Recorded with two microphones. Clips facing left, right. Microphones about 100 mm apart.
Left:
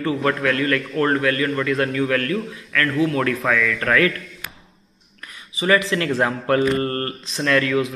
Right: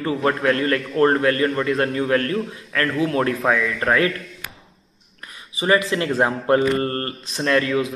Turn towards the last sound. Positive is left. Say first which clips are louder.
# even
turn(degrees=-25)  # may be behind; listen again after turning